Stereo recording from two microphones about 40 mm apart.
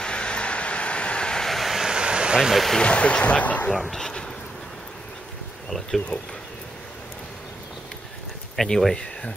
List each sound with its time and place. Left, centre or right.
0.0 s vehicle: left
1.4 s vehicle: centre
1.9 s vehicle: right
2.5 s speech: centre
2.8 s speech: left
3.7 s speech: centre
4.0 s speech: left
5.7 s speech: centre
8.6 s speech: centre